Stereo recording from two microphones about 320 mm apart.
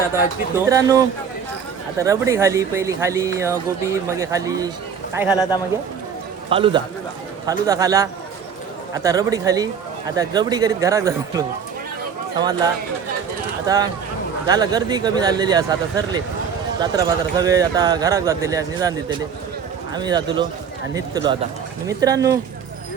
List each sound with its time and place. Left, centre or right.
0.5 s speech: centre
5.3 s speech: centre
6.5 s speech: centre
13.7 s speech: centre